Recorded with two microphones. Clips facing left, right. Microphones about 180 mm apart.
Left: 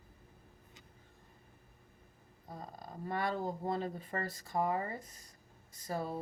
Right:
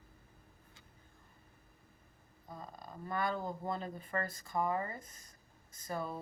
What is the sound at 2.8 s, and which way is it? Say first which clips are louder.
Speech: even; 35° left (ahead or behind).